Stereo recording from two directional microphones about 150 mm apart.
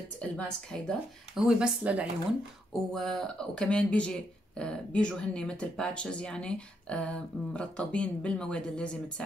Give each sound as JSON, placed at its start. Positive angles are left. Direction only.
{"t": 0.2, "sound": "speech", "side_deg": 5}
{"t": 1.4, "sound": "speech", "side_deg": -5}